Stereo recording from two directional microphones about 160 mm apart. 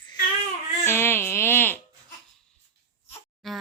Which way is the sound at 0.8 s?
15° left (ahead or behind).